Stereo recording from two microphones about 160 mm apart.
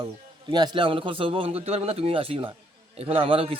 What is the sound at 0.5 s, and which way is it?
Speech, 30° right (ahead or behind).